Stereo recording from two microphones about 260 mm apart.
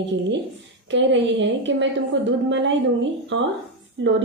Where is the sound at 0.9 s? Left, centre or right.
Right.